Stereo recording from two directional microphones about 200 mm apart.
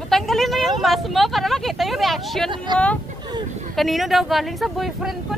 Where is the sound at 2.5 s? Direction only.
25° right (ahead or behind).